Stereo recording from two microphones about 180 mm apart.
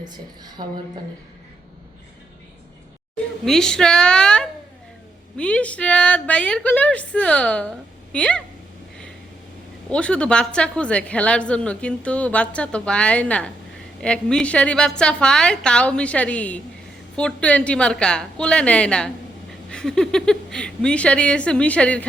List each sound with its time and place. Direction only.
0.0 s a woman's voice: 20° right (ahead or behind)
3.4 s a woman's voice: 5° left (ahead or behind)
9.9 s a woman's voice: 5° left (ahead or behind)